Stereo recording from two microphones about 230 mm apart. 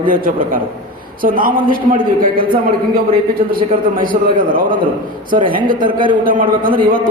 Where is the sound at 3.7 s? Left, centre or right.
Right.